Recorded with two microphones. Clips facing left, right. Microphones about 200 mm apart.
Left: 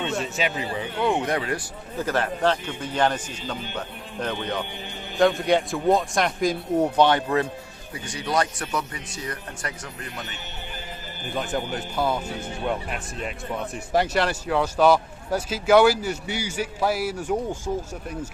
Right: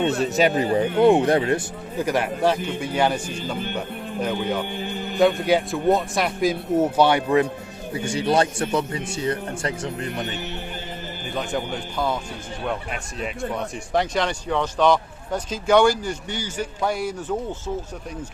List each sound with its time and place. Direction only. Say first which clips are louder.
0.3 s speech: right 8 dB; 40° right (ahead or behind); by 2.0 s 25° right (ahead or behind)
2.0 s speech: right 2 dB; 10° right (ahead or behind)
7.9 s speech: right 5 dB; 25° right (ahead or behind)
11.3 s speech: right 1 dB; 5° left (ahead or behind)